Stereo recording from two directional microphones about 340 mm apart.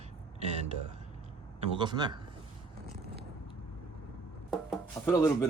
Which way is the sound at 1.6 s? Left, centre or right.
Centre.